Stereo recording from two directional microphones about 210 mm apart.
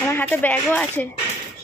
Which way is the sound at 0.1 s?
10° left (ahead or behind).